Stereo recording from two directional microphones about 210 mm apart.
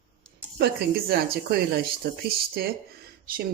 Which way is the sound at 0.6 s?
45° right (ahead or behind).